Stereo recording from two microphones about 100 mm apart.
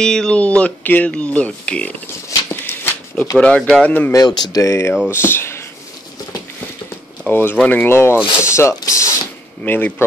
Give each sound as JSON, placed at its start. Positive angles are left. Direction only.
{"t": 0.0, "sound": "speech", "side_deg": 5}
{"t": 2.5, "sound": "a sound", "side_deg": 20}
{"t": 3.3, "sound": "speech", "side_deg": 10}
{"t": 4.1, "sound": "speech", "side_deg": 40}
{"t": 7.2, "sound": "speech", "side_deg": 20}
{"t": 9.6, "sound": "speech", "side_deg": 15}